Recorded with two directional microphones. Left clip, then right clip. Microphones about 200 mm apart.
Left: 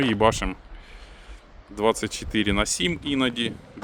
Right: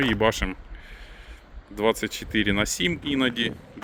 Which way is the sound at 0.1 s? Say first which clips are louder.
Left 2 dB; 10° left (ahead or behind).